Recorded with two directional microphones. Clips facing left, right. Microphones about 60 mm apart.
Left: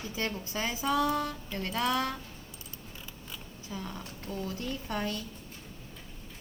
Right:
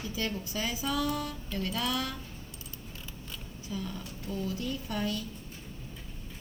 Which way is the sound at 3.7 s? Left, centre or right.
Left.